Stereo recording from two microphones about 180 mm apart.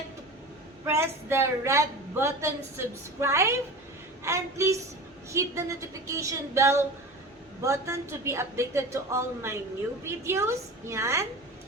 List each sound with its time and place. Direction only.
0.9 s a woman's voice: 15° right (ahead or behind)